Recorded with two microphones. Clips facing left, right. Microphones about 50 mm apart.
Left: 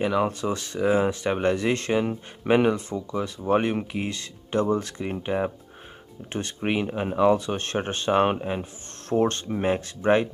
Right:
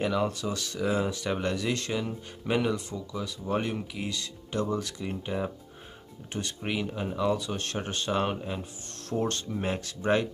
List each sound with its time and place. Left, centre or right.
0.0 s speech: left
0.3 s speech: left